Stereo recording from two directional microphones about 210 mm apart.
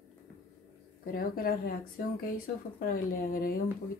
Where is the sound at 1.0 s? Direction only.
45° left (ahead or behind).